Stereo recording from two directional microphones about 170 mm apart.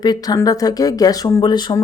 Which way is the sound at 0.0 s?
25° left (ahead or behind).